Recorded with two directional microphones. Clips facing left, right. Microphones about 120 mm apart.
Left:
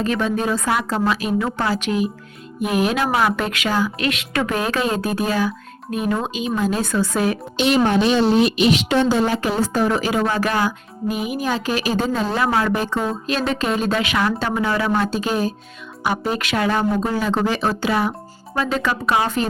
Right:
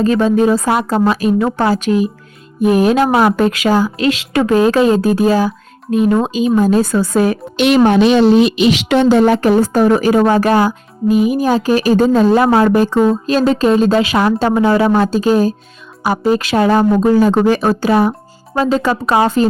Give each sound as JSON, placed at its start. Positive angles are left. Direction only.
{"t": 0.0, "sound": "speech", "side_deg": -35}
{"t": 7.5, "sound": "a woman's voice", "side_deg": -70}
{"t": 7.9, "sound": "a woman's voice", "side_deg": -80}